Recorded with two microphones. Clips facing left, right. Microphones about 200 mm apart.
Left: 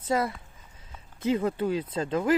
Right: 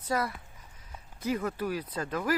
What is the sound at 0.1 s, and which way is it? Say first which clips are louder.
Speech: left 4 dB; 25° left (ahead or behind).